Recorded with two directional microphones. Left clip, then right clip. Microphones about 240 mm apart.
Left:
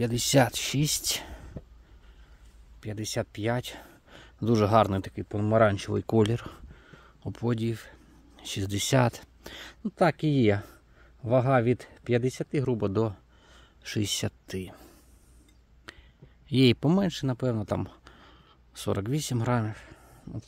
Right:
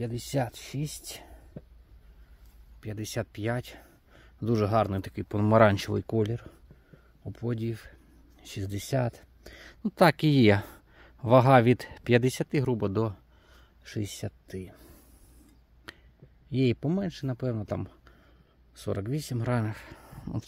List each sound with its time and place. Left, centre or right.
0.0 s speech: left
2.8 s speech: centre
5.1 s speech: centre
6.0 s a sound: centre
7.3 s speech: centre
9.8 s speech: centre
13.8 s speech: centre
15.9 s a sound: centre
16.4 s speech: centre
19.6 s a sound: centre